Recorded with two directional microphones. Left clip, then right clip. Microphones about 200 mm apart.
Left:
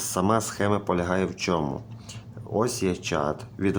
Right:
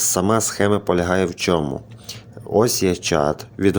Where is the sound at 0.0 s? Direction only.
20° right (ahead or behind).